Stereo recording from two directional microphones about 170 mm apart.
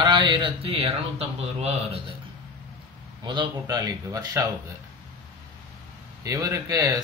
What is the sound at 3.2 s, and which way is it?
Speech, 30° right (ahead or behind).